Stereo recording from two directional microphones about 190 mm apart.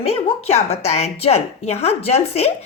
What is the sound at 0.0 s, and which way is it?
A woman's voice, 35° left (ahead or behind).